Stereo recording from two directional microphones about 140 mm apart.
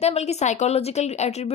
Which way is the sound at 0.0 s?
50° left (ahead or behind).